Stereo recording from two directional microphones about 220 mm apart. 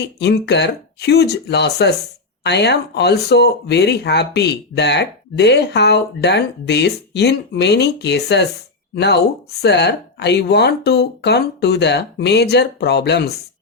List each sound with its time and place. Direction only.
0.0 s speech: 50° left (ahead or behind)